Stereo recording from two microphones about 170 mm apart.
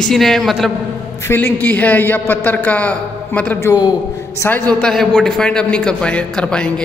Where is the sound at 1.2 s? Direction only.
10° left (ahead or behind).